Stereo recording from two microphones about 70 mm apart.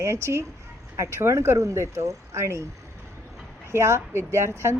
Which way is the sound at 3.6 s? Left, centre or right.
Right.